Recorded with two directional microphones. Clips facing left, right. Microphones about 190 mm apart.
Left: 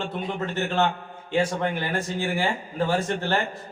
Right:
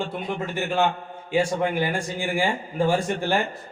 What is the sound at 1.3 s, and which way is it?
A man's voice, 10° right (ahead or behind).